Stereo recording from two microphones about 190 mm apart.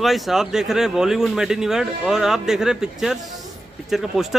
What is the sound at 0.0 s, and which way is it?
Speech, centre (ahead or behind).